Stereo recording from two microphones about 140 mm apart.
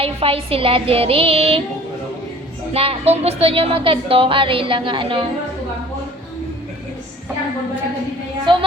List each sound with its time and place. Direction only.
0.0 s child singing: 45° right (ahead or behind)
2.7 s speech: 45° right (ahead or behind)
8.5 s speech: 35° right (ahead or behind)